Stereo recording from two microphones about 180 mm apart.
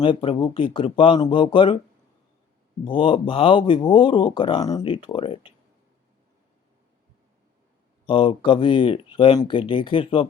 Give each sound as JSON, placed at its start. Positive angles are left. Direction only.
{"t": 0.0, "sound": "speech", "side_deg": 30}
{"t": 2.8, "sound": "speech", "side_deg": 30}
{"t": 8.0, "sound": "speech", "side_deg": 30}